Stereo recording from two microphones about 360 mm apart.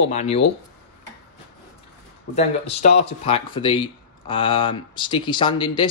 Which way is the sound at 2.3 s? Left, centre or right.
Centre.